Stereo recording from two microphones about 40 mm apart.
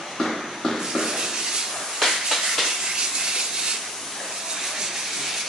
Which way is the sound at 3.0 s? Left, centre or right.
Centre.